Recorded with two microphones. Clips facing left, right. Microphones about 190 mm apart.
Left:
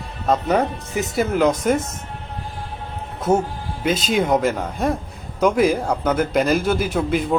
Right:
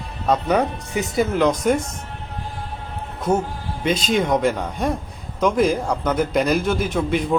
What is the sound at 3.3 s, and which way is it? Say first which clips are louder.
A man's voice: left 2 dB; 5° left (ahead or behind).